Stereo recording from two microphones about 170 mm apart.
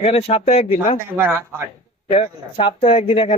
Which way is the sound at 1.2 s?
10° right (ahead or behind).